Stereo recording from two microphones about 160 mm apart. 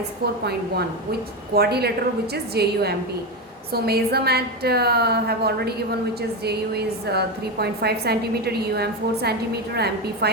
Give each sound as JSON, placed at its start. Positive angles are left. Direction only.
{"t": 1.5, "sound": "a woman's voice", "side_deg": -85}